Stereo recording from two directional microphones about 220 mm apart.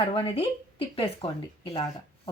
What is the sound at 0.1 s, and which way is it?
Speech, 25° left (ahead or behind).